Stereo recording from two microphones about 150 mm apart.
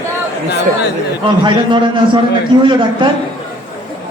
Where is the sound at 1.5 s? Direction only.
35° right (ahead or behind).